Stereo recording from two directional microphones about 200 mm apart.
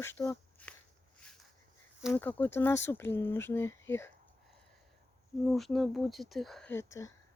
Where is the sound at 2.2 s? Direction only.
10° left (ahead or behind).